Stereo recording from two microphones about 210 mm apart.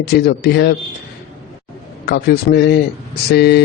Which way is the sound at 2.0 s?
50° left (ahead or behind).